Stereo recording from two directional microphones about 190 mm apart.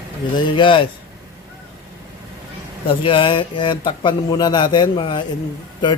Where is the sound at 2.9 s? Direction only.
25° left (ahead or behind).